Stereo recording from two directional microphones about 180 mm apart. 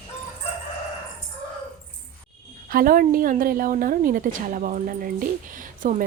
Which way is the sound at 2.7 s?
55° right (ahead or behind).